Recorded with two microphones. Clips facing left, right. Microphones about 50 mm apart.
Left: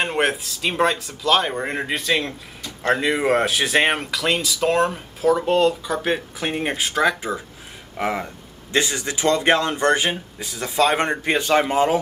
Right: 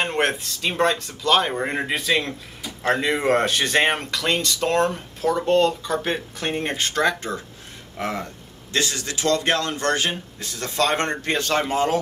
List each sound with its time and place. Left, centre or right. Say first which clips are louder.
0.0 s speech: left 1 dB; centre